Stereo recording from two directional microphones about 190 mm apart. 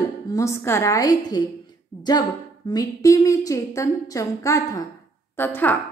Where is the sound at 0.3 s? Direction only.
15° left (ahead or behind).